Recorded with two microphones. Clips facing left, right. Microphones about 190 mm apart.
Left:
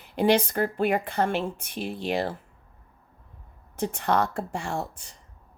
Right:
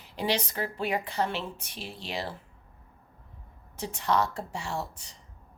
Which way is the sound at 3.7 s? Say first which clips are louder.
Left 3 dB; 55° left (ahead or behind).